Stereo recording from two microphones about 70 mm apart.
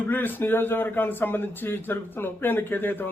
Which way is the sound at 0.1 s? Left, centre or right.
Left.